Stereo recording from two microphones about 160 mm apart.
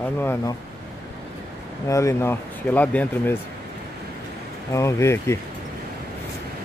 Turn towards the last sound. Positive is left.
turn(degrees=15)  # may be behind; listen again after turning